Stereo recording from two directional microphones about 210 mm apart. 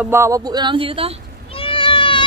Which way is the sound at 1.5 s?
25° left (ahead or behind).